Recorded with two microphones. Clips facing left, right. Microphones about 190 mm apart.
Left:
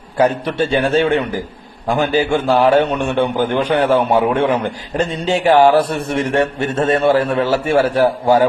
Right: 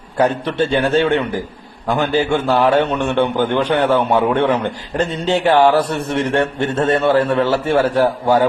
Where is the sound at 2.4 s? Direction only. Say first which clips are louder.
Left 2 dB; 45° left (ahead or behind).